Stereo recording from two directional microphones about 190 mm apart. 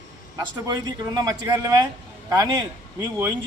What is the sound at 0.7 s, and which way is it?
Speech, 20° right (ahead or behind).